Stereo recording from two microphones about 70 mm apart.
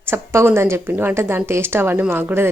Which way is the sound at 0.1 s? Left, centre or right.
Right.